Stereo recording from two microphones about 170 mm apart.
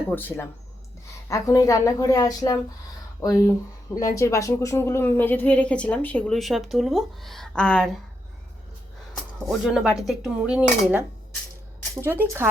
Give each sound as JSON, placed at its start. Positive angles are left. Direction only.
{"t": 0.1, "sound": "a woman's voice", "side_deg": 10}
{"t": 9.5, "sound": "speech", "side_deg": -5}